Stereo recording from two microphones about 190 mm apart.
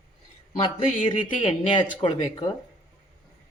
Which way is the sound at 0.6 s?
30° left (ahead or behind).